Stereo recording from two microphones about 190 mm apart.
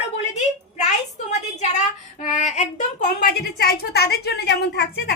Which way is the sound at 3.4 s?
55° left (ahead or behind).